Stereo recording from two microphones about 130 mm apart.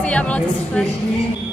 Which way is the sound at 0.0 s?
10° left (ahead or behind).